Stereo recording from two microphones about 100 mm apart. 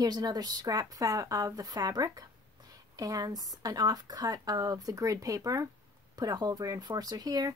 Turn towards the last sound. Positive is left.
turn(degrees=-40)  # may be behind; listen again after turning